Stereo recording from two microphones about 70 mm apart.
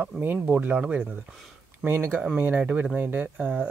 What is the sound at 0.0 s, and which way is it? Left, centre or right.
Speech, right.